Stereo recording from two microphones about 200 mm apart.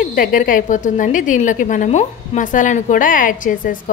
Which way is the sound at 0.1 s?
45° left (ahead or behind).